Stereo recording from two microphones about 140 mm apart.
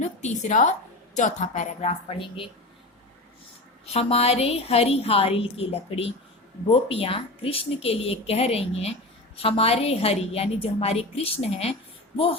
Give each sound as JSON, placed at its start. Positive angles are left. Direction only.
{"t": 0.0, "sound": "a woman's voice", "side_deg": 55}
{"t": 3.9, "sound": "a woman's voice", "side_deg": 45}